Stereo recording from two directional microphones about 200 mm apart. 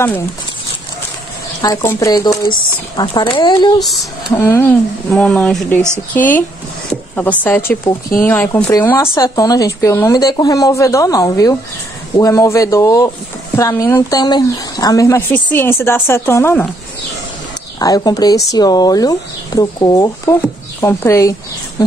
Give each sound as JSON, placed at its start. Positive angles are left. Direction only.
{"t": 1.6, "sound": "a woman's voice", "side_deg": 15}
{"t": 17.7, "sound": "a woman's voice", "side_deg": 20}